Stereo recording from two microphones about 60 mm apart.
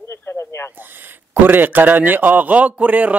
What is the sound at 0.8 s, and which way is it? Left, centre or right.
Speech, right.